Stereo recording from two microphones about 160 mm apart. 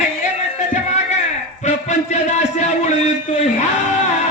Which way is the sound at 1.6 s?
45° left (ahead or behind).